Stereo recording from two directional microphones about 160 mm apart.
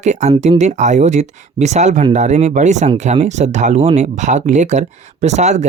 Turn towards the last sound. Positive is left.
turn(degrees=-45)  # may be behind; listen again after turning